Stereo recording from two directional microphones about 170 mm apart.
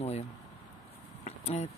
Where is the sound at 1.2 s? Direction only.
40° left (ahead or behind).